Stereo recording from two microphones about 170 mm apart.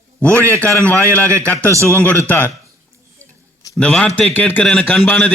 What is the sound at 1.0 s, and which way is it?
Speech, 15° right (ahead or behind).